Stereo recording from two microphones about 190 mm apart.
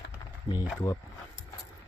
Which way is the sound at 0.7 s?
10° left (ahead or behind).